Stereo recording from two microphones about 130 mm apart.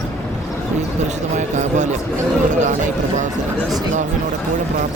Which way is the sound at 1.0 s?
65° right (ahead or behind).